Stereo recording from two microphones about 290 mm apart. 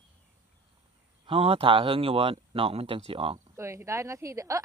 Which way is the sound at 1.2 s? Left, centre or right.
Centre.